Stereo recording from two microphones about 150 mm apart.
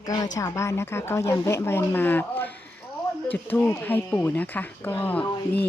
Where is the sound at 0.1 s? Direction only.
20° left (ahead or behind).